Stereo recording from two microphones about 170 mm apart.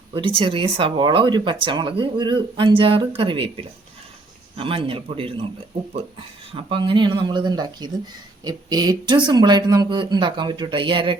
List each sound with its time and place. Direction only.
0.1 s a man's voice: 30° right (ahead or behind)
6.5 s speech: 30° right (ahead or behind)